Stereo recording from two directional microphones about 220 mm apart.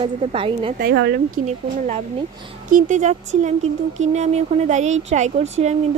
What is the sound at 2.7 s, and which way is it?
Speech, 35° right (ahead or behind).